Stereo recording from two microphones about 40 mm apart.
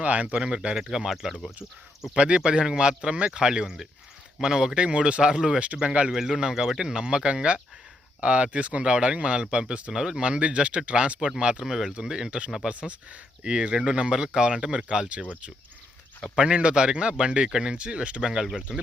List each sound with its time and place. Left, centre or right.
0.0 s speech: right
0.8 s speech: centre
2.1 s speech: right
6.1 s speech: centre; by 8.9 s right
8.9 s speech: right
9.9 s speech: centre
11.6 s speech: centre
16.3 s speech: right
18.3 s speech: centre